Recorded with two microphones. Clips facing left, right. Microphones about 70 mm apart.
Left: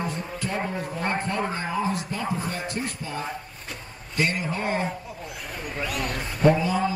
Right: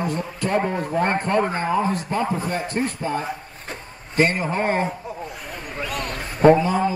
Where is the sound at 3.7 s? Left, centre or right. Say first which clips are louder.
Right 5 dB; right.